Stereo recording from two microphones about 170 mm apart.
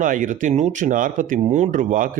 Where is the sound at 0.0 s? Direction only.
50° right (ahead or behind).